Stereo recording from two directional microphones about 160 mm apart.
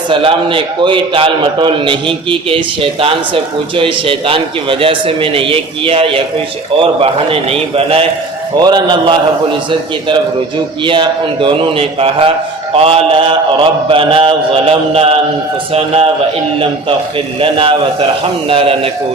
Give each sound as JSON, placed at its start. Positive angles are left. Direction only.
{"t": 0.1, "sound": "a man's voice", "side_deg": -35}
{"t": 8.5, "sound": "a man's voice", "side_deg": -25}
{"t": 10.8, "sound": "a man's voice", "side_deg": -30}
{"t": 17.4, "sound": "a man's voice", "side_deg": -35}